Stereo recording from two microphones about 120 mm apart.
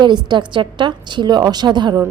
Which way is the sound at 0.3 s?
40° right (ahead or behind).